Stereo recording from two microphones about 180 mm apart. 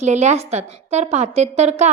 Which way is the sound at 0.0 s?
40° right (ahead or behind).